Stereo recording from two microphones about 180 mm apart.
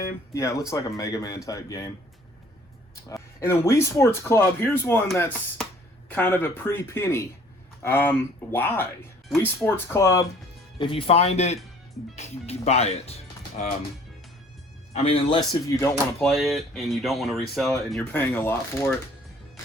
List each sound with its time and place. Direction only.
0.3 s speech: 20° left (ahead or behind)
3.4 s speech: 15° left (ahead or behind)
6.1 s speech: 10° left (ahead or behind)
10.8 s speech: 30° left (ahead or behind)
14.9 s speech: 30° left (ahead or behind); by 16.0 s 15° left (ahead or behind)
16.2 s speech: centre (ahead or behind)